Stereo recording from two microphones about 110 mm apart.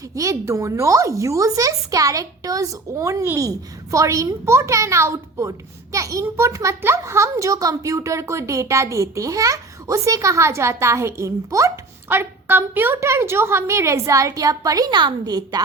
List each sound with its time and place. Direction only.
0.1 s speech: 30° right (ahead or behind)